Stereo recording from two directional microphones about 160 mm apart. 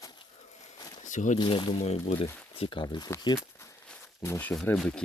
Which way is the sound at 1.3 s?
30° left (ahead or behind).